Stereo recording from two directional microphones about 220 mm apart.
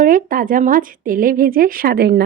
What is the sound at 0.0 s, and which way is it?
Speech, 40° right (ahead or behind).